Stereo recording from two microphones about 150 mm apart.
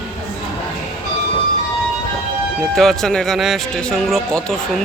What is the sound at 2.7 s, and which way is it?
Speech, centre (ahead or behind).